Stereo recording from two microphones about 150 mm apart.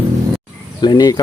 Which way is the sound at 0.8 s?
25° left (ahead or behind).